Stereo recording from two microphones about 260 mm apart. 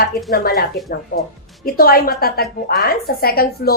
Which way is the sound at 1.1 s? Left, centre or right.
Left.